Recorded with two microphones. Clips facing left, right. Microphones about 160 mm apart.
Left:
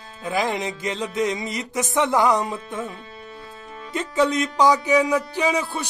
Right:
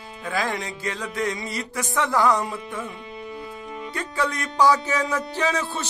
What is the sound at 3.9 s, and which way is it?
Speech, 20° left (ahead or behind).